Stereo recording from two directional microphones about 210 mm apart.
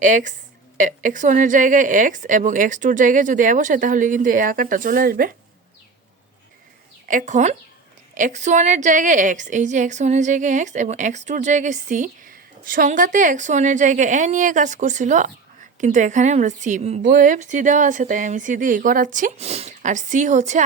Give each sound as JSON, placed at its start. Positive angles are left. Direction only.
{"t": 0.0, "sound": "a woman's voice", "side_deg": -40}
{"t": 7.1, "sound": "a woman's voice", "side_deg": -35}